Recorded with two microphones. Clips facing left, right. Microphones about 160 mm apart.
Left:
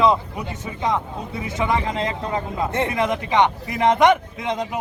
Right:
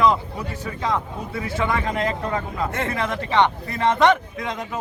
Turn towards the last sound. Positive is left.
turn(degrees=20)  # may be behind; listen again after turning